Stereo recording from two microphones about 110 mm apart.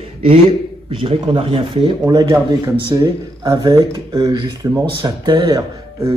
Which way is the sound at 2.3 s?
30° right (ahead or behind).